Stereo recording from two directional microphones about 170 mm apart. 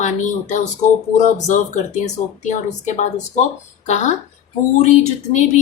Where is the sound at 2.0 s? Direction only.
45° left (ahead or behind).